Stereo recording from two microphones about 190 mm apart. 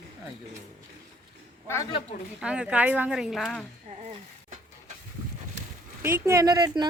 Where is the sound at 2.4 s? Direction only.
5° right (ahead or behind).